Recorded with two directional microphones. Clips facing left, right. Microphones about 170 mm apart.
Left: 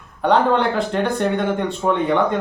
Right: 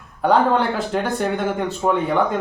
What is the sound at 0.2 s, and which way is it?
Speech, 5° right (ahead or behind).